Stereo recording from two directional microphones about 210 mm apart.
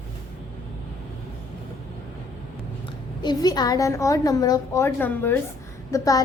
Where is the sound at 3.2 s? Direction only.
20° left (ahead or behind).